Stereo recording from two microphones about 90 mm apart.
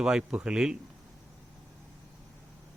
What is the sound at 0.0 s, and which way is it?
Speech, 10° right (ahead or behind).